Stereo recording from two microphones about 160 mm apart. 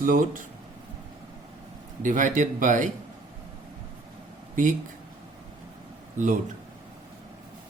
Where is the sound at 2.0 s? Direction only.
55° right (ahead or behind).